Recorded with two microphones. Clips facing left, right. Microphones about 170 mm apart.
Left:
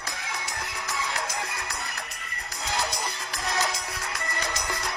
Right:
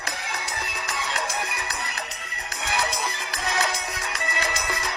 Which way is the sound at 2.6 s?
90° right.